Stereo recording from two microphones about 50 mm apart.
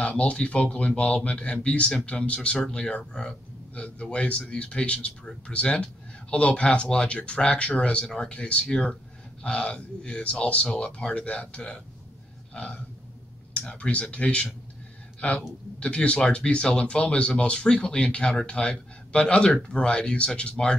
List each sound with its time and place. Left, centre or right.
0.0 s speech: left
13.5 s speech: left